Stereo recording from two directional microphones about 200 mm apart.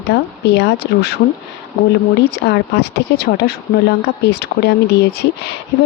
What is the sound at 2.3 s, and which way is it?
Speech, 55° left (ahead or behind).